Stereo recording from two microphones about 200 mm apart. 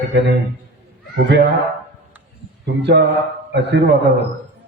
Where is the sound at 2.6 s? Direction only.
60° right (ahead or behind).